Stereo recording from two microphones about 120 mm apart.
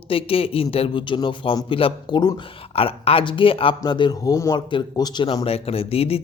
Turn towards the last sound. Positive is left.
turn(degrees=55)  # may be behind; listen again after turning